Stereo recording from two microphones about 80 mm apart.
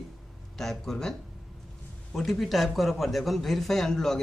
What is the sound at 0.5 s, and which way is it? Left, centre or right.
Speech, centre.